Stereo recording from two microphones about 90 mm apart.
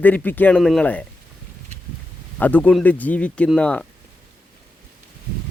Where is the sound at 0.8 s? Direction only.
15° left (ahead or behind).